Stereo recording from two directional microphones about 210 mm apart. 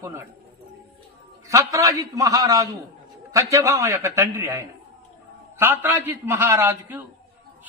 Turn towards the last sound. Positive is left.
turn(degrees=-10)  # may be behind; listen again after turning